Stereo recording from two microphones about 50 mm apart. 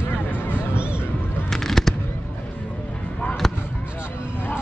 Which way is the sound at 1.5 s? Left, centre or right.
Centre.